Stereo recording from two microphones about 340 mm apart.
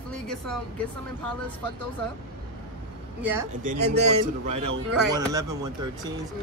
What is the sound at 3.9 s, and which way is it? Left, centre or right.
Speech, right.